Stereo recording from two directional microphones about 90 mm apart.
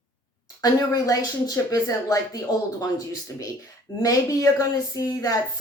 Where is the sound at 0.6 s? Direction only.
45° left (ahead or behind).